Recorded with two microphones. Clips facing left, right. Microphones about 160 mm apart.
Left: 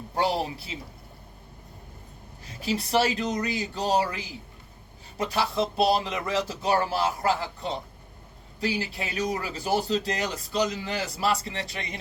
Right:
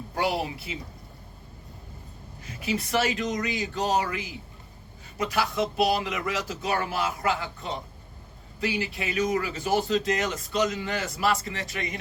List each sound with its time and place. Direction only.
0.1 s speech: 25° left (ahead or behind)
2.5 s speech: 30° left (ahead or behind)